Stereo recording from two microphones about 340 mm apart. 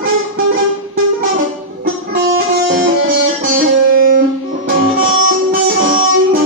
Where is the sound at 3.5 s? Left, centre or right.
Right.